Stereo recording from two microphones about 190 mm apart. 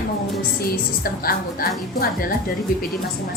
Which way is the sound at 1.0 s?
50° left (ahead or behind).